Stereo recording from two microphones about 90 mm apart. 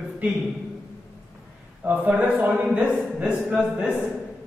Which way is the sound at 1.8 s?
15° right (ahead or behind).